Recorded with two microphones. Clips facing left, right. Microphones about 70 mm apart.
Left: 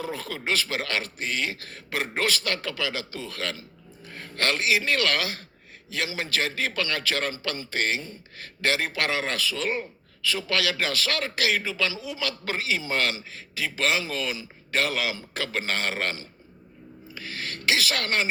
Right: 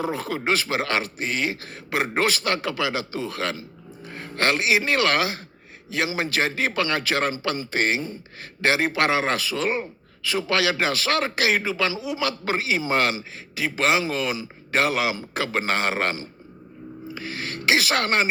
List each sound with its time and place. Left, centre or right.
0.0 s a man's voice: centre